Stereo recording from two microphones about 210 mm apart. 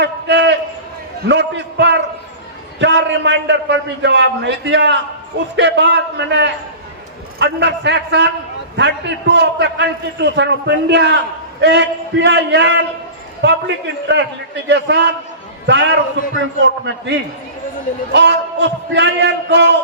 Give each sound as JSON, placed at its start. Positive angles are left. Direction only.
{"t": 0.0, "sound": "a sound", "side_deg": -55}
{"t": 1.3, "sound": "a man's voice", "side_deg": -55}
{"t": 18.1, "sound": "a man's voice", "side_deg": -55}